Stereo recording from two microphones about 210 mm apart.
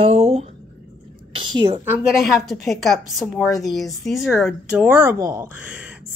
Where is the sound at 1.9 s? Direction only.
Centre (ahead or behind).